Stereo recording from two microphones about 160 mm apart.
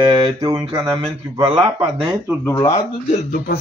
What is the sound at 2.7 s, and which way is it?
Speech, 40° left (ahead or behind).